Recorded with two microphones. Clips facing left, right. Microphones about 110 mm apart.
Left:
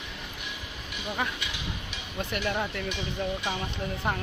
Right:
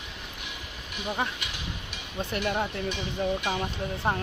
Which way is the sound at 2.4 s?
20° right (ahead or behind).